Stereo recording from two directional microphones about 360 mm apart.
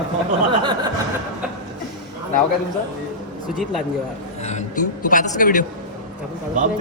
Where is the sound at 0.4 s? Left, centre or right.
Centre.